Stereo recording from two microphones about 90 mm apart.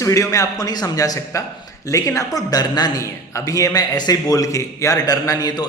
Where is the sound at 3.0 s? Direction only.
40° left (ahead or behind).